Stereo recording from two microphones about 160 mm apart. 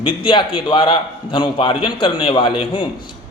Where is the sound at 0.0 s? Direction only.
30° left (ahead or behind).